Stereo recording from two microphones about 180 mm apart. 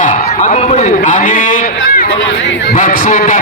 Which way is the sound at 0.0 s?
45° left (ahead or behind).